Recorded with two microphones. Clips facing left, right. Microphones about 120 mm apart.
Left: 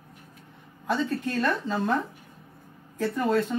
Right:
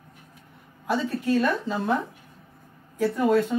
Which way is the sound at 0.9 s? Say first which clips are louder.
Right 3 dB; 10° right (ahead or behind).